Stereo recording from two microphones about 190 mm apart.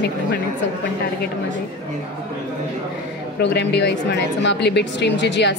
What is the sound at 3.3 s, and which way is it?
A woman's voice, 65° left (ahead or behind).